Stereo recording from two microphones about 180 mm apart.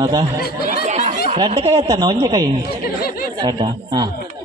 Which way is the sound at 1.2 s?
30° right (ahead or behind).